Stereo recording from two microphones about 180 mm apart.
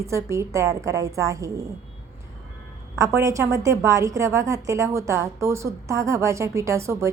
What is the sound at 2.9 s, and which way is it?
A woman's voice, 15° right (ahead or behind).